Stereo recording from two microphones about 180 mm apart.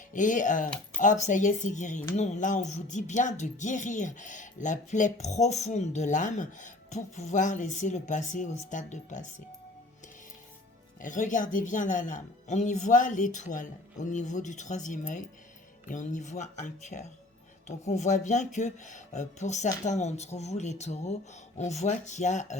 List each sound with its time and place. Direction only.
0.1 s speech: 45° left (ahead or behind)
11.0 s speech: 45° left (ahead or behind)